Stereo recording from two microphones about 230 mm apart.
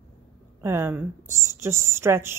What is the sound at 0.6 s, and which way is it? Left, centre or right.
Speech, centre.